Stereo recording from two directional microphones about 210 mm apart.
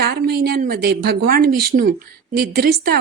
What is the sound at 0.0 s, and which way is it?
A woman's voice, 50° right (ahead or behind).